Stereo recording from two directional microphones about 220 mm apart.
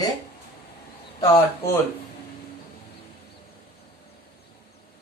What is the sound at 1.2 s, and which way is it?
Speech, 15° left (ahead or behind).